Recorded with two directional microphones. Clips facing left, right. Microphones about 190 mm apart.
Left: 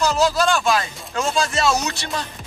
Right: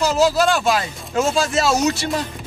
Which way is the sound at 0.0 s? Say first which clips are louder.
Right 2 dB; 5° right (ahead or behind).